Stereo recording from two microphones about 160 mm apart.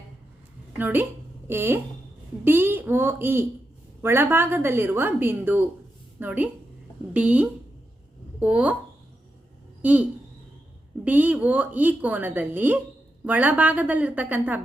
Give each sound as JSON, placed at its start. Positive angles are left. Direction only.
{"t": 0.8, "sound": "a woman's voice", "side_deg": -10}
{"t": 9.8, "sound": "a woman's voice", "side_deg": -10}